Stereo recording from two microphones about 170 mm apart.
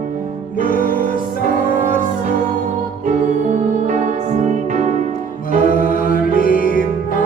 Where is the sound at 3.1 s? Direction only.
45° right (ahead or behind).